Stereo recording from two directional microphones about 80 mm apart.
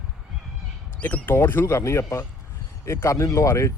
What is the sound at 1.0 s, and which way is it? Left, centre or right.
Speech, left.